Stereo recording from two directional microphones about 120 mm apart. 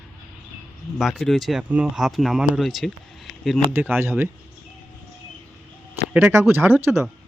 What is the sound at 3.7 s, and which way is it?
Speech, 20° right (ahead or behind).